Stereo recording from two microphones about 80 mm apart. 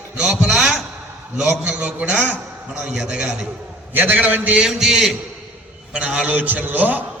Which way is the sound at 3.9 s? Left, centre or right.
Right.